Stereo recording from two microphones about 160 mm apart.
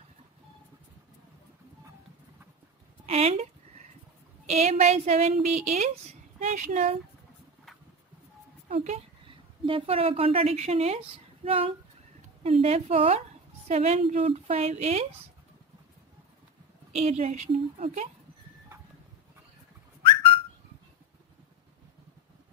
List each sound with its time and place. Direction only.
3.1 s a woman's voice: 40° right (ahead or behind)
4.5 s speech: 45° right (ahead or behind)
8.8 s a woman's voice: 40° right (ahead or behind)
16.9 s speech: 40° right (ahead or behind)